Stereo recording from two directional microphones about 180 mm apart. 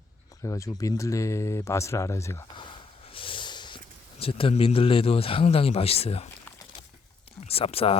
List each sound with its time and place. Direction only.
0.4 s speech: 20° left (ahead or behind)
2.6 s a sound: 30° left (ahead or behind)
4.2 s speech: 30° left (ahead or behind)
7.4 s speech: 35° left (ahead or behind)